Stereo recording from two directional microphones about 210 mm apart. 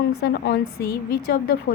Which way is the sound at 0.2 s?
45° left (ahead or behind).